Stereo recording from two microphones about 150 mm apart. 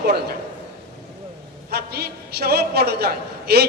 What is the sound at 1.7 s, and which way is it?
A man's voice, 90° right.